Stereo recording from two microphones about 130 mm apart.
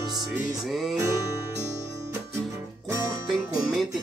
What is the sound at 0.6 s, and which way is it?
Music, centre (ahead or behind).